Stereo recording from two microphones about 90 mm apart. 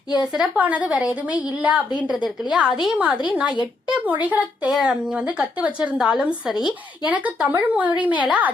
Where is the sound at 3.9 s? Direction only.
15° right (ahead or behind).